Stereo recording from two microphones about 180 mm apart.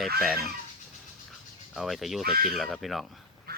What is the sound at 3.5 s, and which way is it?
Duck, 60° right (ahead or behind).